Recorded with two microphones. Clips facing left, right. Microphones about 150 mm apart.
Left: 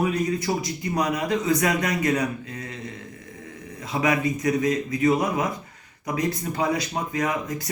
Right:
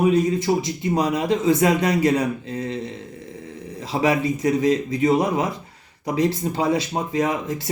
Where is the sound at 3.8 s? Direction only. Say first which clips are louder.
Right 3 dB; 30° right (ahead or behind).